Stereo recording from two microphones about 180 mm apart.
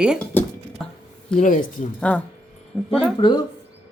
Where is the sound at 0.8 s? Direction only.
5° left (ahead or behind).